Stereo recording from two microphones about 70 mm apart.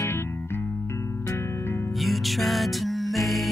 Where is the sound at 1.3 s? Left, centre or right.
Left.